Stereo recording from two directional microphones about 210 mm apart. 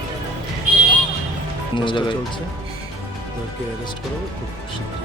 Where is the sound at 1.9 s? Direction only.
20° left (ahead or behind).